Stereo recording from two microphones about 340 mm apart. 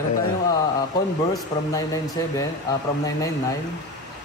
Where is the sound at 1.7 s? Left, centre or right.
Centre.